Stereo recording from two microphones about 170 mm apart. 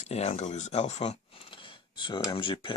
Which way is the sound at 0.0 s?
40° left (ahead or behind).